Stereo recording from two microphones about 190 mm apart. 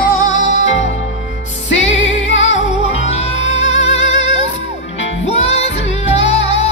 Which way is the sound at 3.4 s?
80° left.